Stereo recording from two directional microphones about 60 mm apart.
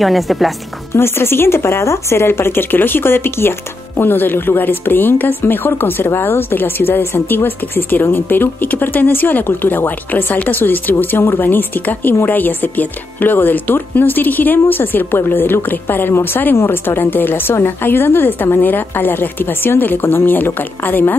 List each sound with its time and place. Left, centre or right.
0.0 s speech: centre
0.9 s speech: left